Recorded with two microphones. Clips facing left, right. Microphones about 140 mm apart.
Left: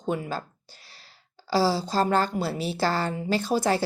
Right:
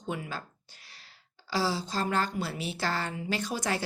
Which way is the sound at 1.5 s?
35° left (ahead or behind).